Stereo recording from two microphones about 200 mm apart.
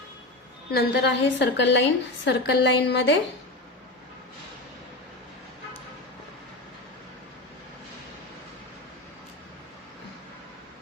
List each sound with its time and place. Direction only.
0.7 s a woman's voice: 60° left (ahead or behind)